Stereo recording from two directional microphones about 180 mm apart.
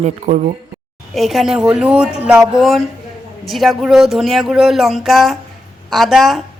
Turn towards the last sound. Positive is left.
turn(degrees=0)  # may be behind; listen again after turning